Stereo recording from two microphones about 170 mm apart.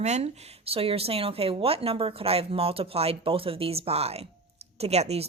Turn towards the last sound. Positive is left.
turn(degrees=-40)  # may be behind; listen again after turning